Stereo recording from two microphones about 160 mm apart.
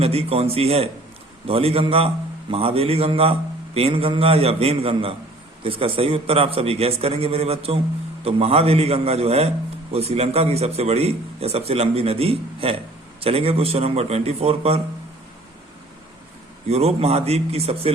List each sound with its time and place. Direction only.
0.0 s a man's voice: 40° right (ahead or behind)
16.6 s a man's voice: 40° right (ahead or behind)